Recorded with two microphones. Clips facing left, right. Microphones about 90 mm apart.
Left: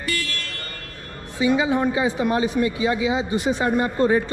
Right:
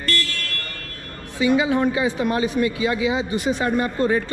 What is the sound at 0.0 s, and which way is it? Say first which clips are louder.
Vehicle: right 2 dB; 5° left (ahead or behind).